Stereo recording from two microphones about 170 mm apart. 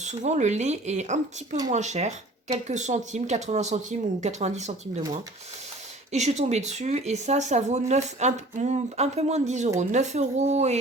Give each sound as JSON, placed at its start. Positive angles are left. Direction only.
{"t": 0.0, "sound": "speech", "side_deg": -45}
{"t": 6.1, "sound": "speech", "side_deg": -40}